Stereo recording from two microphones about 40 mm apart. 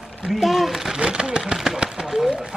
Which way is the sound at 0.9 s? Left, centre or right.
Right.